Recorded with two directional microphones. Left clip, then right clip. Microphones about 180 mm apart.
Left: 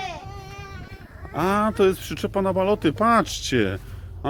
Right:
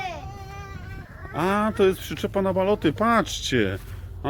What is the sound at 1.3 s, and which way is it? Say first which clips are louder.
Speech: left 2 dB; 10° left (ahead or behind).